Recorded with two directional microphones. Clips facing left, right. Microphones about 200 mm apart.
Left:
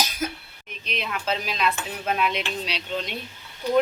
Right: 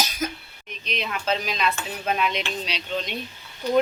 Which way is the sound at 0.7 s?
5° left (ahead or behind).